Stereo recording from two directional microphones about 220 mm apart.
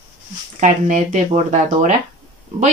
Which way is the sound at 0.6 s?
35° right (ahead or behind).